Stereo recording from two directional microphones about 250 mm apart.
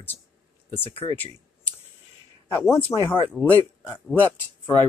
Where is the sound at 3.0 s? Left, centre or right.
Left.